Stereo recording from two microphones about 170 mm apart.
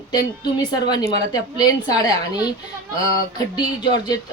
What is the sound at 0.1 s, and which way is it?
Speech, 25° left (ahead or behind).